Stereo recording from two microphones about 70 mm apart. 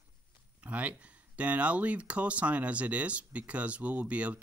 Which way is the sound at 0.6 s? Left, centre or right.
Right.